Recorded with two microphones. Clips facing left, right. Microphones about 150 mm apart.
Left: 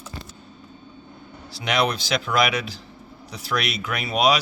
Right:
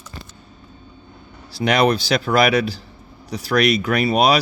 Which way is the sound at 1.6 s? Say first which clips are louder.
Right 6 dB; 40° right (ahead or behind).